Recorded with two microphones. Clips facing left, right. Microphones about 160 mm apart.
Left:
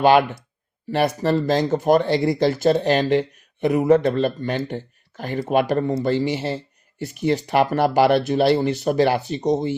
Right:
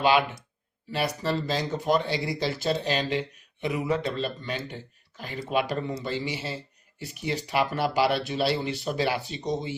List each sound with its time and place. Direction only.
0.0 s speech: 50° left (ahead or behind)